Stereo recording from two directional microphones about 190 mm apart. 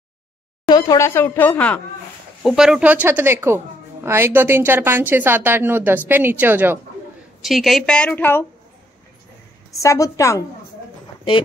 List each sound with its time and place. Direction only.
0.7 s speech: 20° left (ahead or behind)
2.4 s a woman's voice: 5° right (ahead or behind)
9.8 s speech: 15° left (ahead or behind)